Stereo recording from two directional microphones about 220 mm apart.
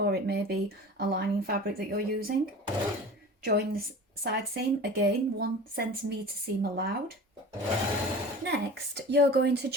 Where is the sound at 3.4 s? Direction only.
45° right (ahead or behind).